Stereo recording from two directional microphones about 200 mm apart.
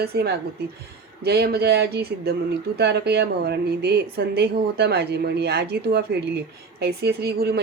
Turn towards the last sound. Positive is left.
turn(degrees=-55)  # may be behind; listen again after turning